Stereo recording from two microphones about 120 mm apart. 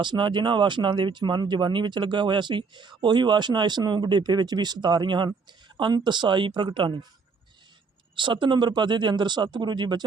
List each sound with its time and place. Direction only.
0.0 s speech: 40° right (ahead or behind)
8.1 s speech: 40° right (ahead or behind)